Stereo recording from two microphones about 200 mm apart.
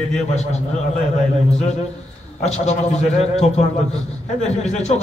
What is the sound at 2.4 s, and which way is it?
Speech, 35° left (ahead or behind).